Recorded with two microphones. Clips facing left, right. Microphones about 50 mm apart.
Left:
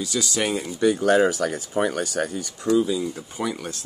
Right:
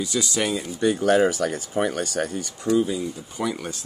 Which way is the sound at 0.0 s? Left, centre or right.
Centre.